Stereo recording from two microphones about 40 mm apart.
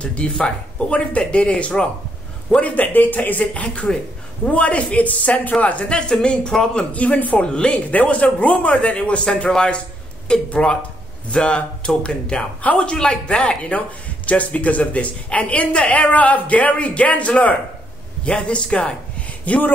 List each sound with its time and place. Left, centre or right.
0.0 s a man's voice: left
2.6 s speech: left
6.2 s a man's voice: left
6.9 s speech: left
7.4 s a man's voice: left
13.4 s speech: left
18.2 s a man's voice: left